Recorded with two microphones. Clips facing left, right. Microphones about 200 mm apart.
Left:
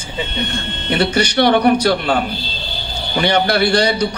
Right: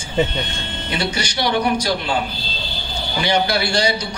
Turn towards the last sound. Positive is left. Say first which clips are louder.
# left 5 dB
turn(degrees=60)  # may be behind; listen again after turning